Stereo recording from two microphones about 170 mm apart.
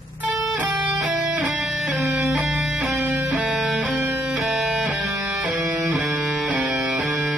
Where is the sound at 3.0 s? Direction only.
15° right (ahead or behind).